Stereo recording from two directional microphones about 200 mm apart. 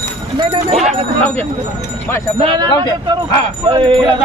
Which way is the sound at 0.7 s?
5° left (ahead or behind).